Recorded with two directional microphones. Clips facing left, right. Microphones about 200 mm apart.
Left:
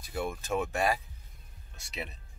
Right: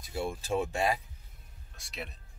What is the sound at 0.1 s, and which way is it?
Speech, 30° right (ahead or behind).